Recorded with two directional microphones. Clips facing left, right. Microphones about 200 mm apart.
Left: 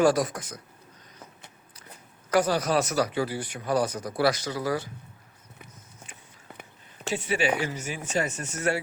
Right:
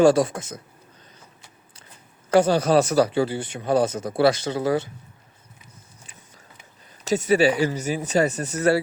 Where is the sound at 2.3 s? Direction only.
30° right (ahead or behind).